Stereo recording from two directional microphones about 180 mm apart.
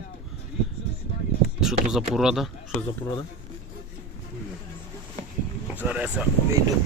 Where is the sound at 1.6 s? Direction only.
Centre (ahead or behind).